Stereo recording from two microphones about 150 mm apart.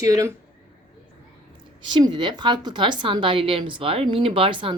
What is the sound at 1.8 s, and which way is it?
A woman's voice, 30° right (ahead or behind).